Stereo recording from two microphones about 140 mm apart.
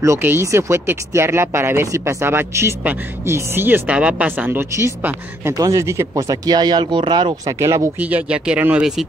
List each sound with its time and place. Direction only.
0.0 s speech: 20° right (ahead or behind)
7.5 s speech: 20° right (ahead or behind)
8.0 s speech: 10° right (ahead or behind)